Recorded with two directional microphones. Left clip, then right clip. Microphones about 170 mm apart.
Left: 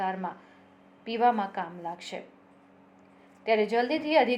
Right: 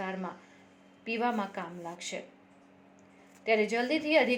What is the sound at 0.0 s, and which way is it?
A woman's voice, 35° right (ahead or behind).